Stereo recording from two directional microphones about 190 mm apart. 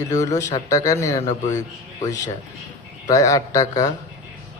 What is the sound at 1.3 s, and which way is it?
Speech, 40° left (ahead or behind).